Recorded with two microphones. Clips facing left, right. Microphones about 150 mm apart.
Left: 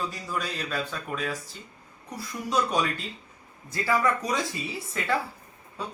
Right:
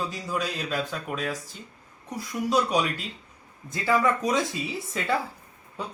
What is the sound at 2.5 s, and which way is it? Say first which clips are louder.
Speech: right 1 dB; 15° right (ahead or behind).